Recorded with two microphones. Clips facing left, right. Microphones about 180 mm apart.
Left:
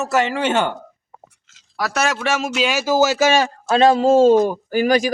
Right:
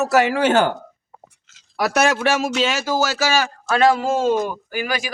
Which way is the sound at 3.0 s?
25° left (ahead or behind).